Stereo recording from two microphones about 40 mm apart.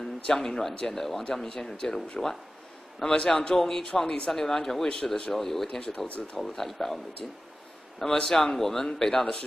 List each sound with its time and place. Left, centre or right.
0.3 s a man's voice: centre
8.0 s a man's voice: centre
8.5 s a man's voice: centre